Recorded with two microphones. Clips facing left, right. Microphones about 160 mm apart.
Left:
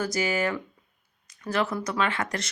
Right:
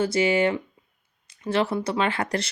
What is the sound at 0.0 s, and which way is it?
Speech, 30° right (ahead or behind).